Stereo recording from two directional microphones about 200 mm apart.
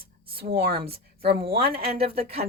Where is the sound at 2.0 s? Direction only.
30° right (ahead or behind).